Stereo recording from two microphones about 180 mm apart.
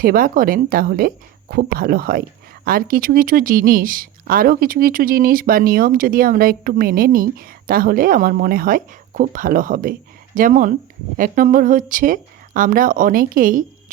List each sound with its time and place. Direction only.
0.0 s speech: 50° right (ahead or behind)